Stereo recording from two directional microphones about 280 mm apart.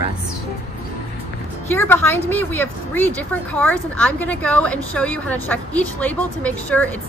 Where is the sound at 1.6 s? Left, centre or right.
Centre.